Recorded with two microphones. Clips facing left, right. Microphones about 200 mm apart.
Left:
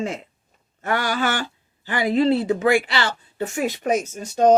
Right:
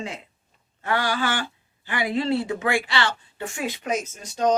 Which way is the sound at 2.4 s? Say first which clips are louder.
Left 6 dB; 35° left (ahead or behind).